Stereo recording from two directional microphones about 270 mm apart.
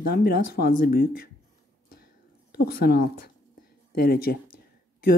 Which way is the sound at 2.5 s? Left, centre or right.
Left.